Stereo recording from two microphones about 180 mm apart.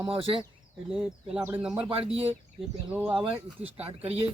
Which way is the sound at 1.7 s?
30° right (ahead or behind).